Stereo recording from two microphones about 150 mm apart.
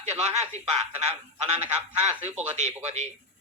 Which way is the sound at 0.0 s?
50° right (ahead or behind).